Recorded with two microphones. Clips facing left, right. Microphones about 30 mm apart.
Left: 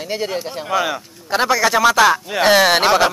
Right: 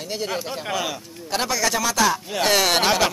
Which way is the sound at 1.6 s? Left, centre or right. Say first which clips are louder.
Left 8 dB; left.